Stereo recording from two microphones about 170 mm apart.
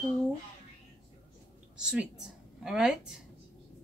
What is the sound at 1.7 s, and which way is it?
A woman's voice, 5° right (ahead or behind).